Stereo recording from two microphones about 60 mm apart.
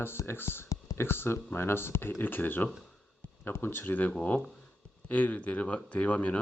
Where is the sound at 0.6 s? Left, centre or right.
Left.